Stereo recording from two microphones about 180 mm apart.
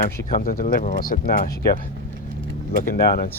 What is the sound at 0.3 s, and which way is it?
Speech, 50° left (ahead or behind).